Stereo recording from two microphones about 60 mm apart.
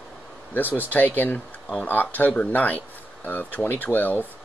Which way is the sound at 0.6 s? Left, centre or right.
Left.